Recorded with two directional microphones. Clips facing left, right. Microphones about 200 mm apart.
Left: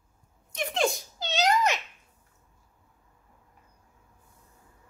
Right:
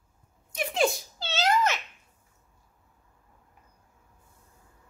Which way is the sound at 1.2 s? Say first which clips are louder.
Left 1 dB; 15° left (ahead or behind).